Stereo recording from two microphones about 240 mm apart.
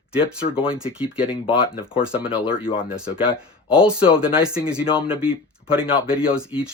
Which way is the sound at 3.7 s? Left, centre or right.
Centre.